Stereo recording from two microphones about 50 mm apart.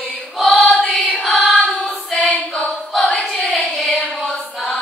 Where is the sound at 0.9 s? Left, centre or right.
Left.